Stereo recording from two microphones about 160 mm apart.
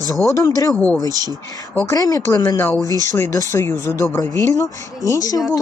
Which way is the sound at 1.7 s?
20° left (ahead or behind).